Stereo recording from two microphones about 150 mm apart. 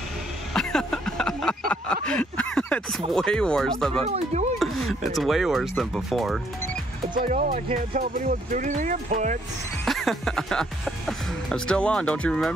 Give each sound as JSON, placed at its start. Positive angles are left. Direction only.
{"t": 0.5, "sound": "a sound", "side_deg": 5}
{"t": 3.1, "sound": "speech", "side_deg": 5}
{"t": 7.2, "sound": "speech", "side_deg": -65}
{"t": 9.8, "sound": "speech", "side_deg": 0}